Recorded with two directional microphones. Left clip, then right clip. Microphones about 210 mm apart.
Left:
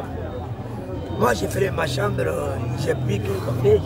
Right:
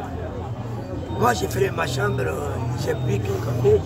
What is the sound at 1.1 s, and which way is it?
Speech, 10° right (ahead or behind).